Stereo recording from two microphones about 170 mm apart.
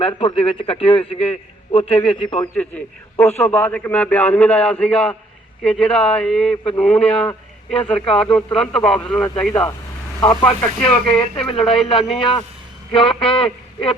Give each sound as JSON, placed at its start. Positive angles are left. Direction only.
{"t": 0.0, "sound": "a man's voice", "side_deg": 30}
{"t": 2.6, "sound": "a man's voice", "side_deg": 10}
{"t": 11.4, "sound": "a man's voice", "side_deg": 30}